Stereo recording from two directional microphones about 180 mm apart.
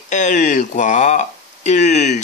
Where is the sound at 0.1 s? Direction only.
45° left (ahead or behind).